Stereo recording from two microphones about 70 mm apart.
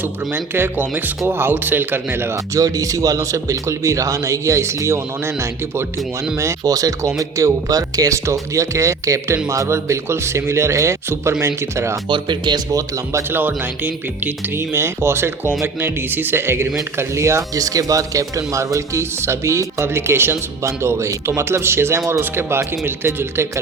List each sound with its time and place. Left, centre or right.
0.3 s speech: right
2.6 s speech: right
6.3 s speech: right
12.3 s speech: right
13.3 s speech: right